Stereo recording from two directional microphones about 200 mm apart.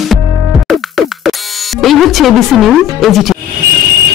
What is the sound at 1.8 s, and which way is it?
Speech, centre (ahead or behind).